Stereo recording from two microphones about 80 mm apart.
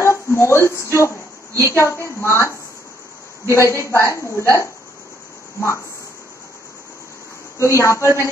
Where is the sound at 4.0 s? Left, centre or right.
Left.